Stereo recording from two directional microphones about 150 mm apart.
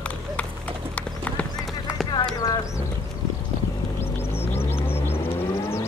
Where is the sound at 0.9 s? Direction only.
10° left (ahead or behind).